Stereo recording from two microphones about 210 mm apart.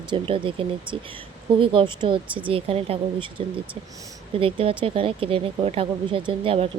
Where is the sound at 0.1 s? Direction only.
25° right (ahead or behind).